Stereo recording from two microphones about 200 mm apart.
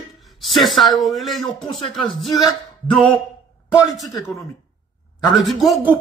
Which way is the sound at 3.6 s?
5° right (ahead or behind).